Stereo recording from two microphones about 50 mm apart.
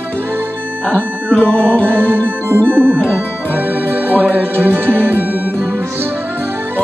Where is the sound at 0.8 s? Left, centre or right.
Left.